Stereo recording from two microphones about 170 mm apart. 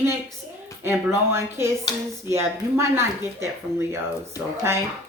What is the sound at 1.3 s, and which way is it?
Speech, 15° right (ahead or behind).